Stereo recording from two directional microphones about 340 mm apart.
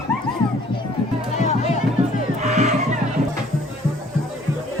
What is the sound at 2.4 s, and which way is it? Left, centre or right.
Music, centre.